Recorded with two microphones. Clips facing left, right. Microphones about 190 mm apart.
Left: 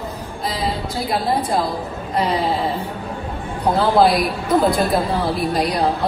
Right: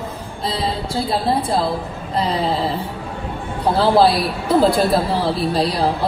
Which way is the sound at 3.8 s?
30° right (ahead or behind).